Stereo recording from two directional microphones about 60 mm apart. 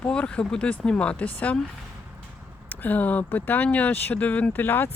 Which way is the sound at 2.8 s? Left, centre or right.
Left.